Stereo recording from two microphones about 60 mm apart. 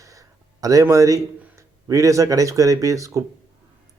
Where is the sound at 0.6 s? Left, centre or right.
Right.